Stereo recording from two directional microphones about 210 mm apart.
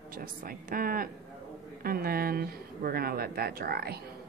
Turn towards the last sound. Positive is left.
turn(degrees=-50)  # may be behind; listen again after turning